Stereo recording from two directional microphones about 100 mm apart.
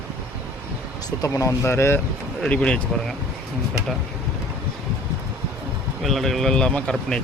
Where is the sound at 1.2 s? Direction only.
35° left (ahead or behind).